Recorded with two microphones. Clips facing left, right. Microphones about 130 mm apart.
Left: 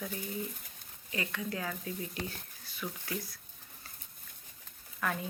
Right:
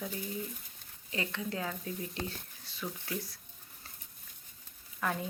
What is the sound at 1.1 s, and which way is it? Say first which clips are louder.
Speech: even; 25° right (ahead or behind).